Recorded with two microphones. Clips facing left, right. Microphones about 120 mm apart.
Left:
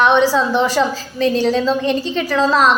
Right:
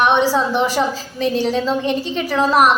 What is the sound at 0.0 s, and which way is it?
A woman's voice, 20° right (ahead or behind).